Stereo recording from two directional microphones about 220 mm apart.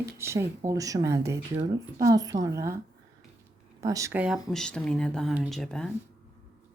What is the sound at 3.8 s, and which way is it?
Speech, 15° right (ahead or behind).